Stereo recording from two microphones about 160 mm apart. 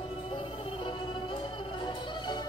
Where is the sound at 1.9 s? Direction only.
30° left (ahead or behind).